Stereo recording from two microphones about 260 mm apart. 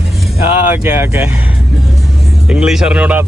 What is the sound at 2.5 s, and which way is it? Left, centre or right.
Speech, centre.